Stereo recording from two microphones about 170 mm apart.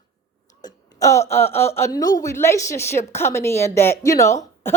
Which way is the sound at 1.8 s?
20° left (ahead or behind).